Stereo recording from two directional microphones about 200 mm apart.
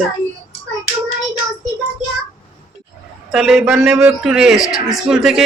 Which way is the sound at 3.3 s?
Centre (ahead or behind).